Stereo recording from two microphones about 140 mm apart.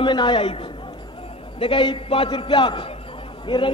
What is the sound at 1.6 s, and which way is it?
A man's voice, 35° left (ahead or behind).